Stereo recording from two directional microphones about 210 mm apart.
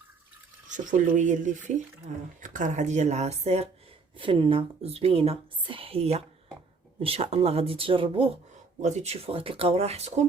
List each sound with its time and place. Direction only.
0.9 s speech: 35° right (ahead or behind)